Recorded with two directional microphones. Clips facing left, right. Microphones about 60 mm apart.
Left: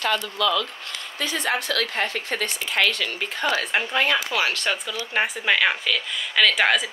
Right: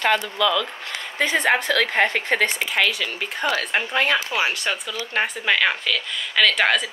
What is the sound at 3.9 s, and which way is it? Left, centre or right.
Speech, right.